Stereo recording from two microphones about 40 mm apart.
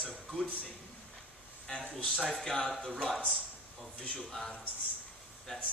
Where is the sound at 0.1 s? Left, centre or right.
Centre.